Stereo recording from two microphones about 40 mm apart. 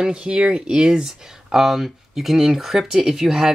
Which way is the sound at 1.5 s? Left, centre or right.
Centre.